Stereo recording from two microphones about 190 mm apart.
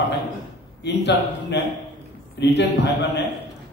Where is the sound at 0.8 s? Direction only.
65° left (ahead or behind).